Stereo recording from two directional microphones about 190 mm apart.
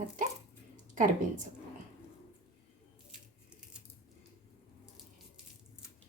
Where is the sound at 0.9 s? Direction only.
45° right (ahead or behind).